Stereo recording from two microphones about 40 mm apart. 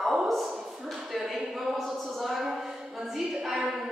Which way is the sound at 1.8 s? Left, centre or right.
Centre.